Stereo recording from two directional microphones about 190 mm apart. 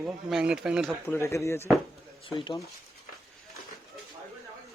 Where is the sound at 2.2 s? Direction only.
25° left (ahead or behind).